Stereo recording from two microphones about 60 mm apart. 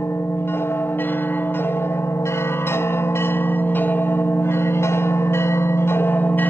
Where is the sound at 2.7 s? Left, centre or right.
Left.